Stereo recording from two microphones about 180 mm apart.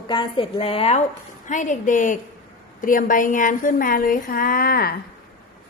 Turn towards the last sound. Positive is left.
turn(degrees=55)  # may be behind; listen again after turning